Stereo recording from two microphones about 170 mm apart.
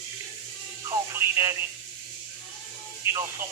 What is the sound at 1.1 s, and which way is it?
Speech, 15° right (ahead or behind).